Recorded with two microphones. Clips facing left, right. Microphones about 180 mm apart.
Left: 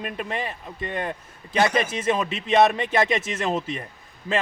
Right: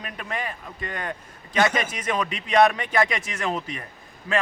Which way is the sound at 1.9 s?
25° left (ahead or behind).